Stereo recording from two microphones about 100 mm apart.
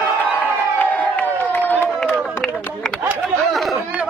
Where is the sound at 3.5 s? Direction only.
Centre (ahead or behind).